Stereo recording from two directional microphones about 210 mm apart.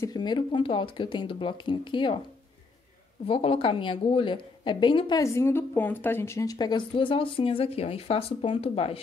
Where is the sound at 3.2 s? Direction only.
25° left (ahead or behind).